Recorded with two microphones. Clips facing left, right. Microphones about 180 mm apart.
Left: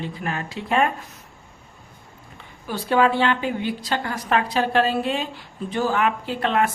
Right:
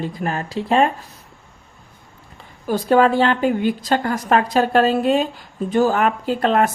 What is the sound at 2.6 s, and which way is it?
Speech, 40° right (ahead or behind).